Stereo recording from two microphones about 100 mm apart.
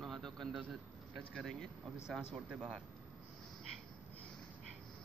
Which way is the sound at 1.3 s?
5° left (ahead or behind).